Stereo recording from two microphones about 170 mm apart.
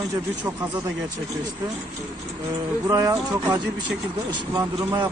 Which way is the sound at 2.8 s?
20° right (ahead or behind).